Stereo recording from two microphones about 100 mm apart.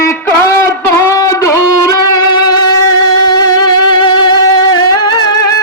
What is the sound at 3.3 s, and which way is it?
Music, 45° left (ahead or behind).